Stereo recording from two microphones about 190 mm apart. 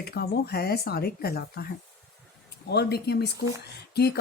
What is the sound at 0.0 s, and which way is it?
Speech, 55° left (ahead or behind).